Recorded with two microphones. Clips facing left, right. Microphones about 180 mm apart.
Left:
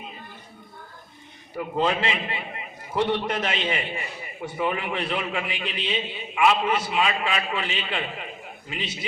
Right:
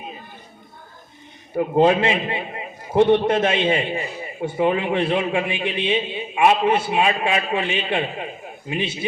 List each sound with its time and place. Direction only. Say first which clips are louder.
1.5 s a man's voice: right 8 dB; 50° right (ahead or behind)
2.3 s a sound: right 6 dB; 25° right (ahead or behind)
3.2 s a man's voice: right 8 dB; 25° right (ahead or behind)